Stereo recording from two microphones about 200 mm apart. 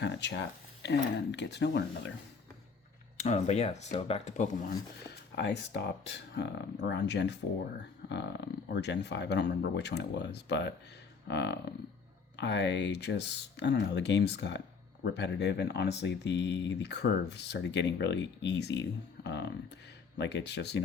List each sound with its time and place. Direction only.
0.0 s speech: 60° left (ahead or behind)
3.2 s speech: 35° left (ahead or behind)
5.0 s speech: 60° left (ahead or behind)